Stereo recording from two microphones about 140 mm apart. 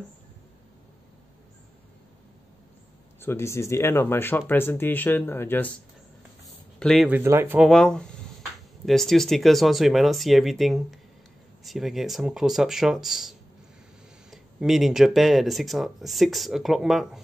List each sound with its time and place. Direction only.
3.2 s speech: 20° left (ahead or behind)
6.8 s speech: 5° left (ahead or behind)
7.1 s speech: 15° right (ahead or behind)
7.6 s speech: 5° left (ahead or behind)